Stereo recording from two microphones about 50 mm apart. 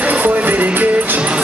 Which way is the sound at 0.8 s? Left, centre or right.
Right.